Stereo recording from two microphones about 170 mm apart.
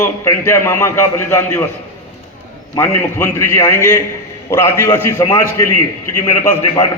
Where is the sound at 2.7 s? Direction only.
15° left (ahead or behind).